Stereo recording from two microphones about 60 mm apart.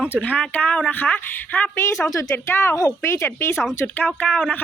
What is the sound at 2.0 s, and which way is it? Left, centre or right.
Speech, left.